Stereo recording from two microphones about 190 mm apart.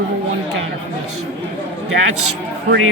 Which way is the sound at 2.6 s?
80° right.